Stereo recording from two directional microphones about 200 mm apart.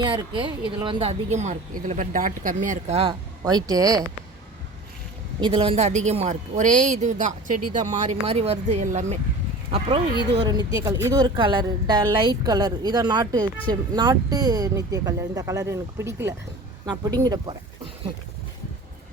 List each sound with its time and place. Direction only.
0.0 s a woman's voice: 25° right (ahead or behind)
3.4 s speech: 20° right (ahead or behind)
5.4 s a woman's voice: 25° right (ahead or behind)
10.4 s a woman's voice: 20° right (ahead or behind)